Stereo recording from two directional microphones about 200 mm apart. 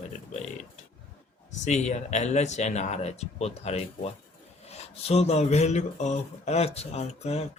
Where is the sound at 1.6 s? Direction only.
35° left (ahead or behind).